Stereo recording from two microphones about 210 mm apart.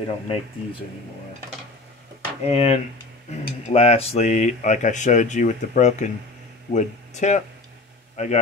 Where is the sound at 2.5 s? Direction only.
30° left (ahead or behind).